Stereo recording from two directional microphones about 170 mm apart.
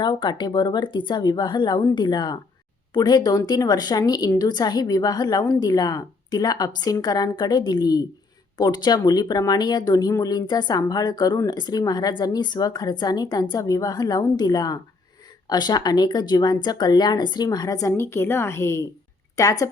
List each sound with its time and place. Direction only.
0.0 s speech: 25° left (ahead or behind)